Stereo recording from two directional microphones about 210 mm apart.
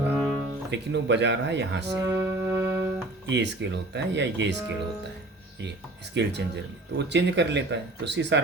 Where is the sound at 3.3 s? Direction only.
55° right (ahead or behind).